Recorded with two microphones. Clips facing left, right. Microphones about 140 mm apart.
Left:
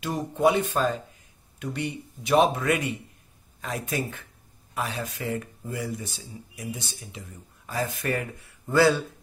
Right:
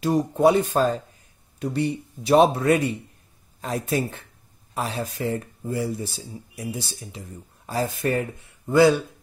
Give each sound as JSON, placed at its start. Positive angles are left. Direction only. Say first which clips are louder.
{"t": 0.0, "sound": "speech", "louder": "right 5 dB", "side_deg": -35}